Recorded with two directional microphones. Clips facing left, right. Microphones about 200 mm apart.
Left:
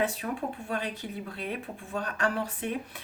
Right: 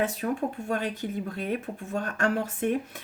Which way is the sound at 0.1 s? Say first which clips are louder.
Right 4 dB; 45° right (ahead or behind).